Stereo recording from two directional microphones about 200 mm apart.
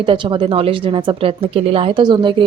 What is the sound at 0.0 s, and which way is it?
Speech, 25° right (ahead or behind).